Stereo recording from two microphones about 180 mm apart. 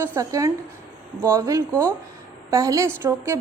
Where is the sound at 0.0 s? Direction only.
15° right (ahead or behind).